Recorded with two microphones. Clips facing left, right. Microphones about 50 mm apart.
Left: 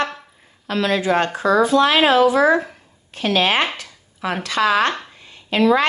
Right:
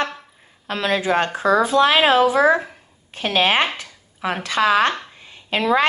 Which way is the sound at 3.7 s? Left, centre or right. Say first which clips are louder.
Right 1 dB; right.